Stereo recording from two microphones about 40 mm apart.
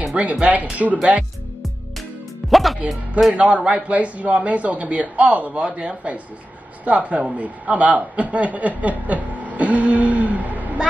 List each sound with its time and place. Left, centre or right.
0.1 s a man's voice: right
2.5 s music: centre
2.9 s speech: centre
3.3 s a man's voice: right